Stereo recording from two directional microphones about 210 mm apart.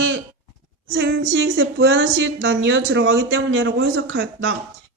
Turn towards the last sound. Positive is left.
turn(degrees=-65)  # may be behind; listen again after turning